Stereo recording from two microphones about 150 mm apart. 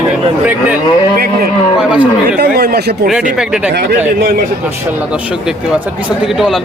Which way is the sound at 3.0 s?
5° right (ahead or behind).